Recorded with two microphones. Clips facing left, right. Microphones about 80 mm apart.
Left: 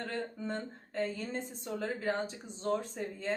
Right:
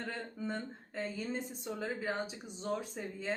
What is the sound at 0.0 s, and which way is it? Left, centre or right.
A woman's voice, centre.